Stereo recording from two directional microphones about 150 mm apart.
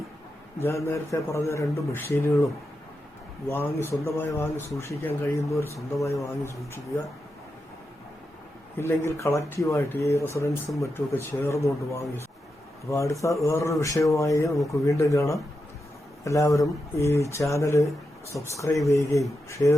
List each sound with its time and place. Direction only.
0.6 s a man's voice: 20° left (ahead or behind)
3.5 s a man's voice: 15° left (ahead or behind)
8.8 s a man's voice: 15° left (ahead or behind)